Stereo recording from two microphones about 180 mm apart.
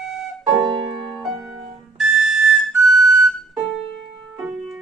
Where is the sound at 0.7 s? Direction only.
25° right (ahead or behind).